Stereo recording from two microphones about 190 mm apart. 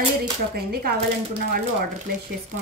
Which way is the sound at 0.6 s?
55° right (ahead or behind).